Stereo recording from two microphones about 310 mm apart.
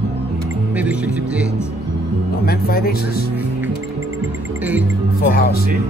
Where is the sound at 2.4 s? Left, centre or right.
Left.